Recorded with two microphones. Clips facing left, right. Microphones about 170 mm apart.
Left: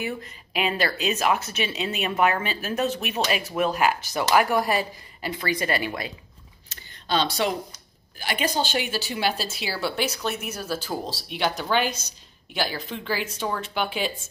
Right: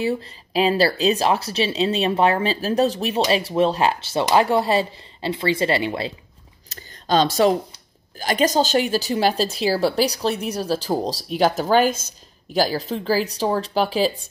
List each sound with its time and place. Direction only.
0.0 s a woman's voice: 30° right (ahead or behind)
6.7 s a woman's voice: 40° right (ahead or behind)